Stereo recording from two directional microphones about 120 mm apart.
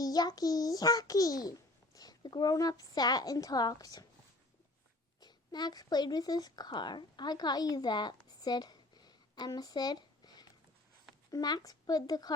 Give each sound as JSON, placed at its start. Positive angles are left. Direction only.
{"t": 0.0, "sound": "a child's voice", "side_deg": 35}
{"t": 5.2, "sound": "a child's voice", "side_deg": 35}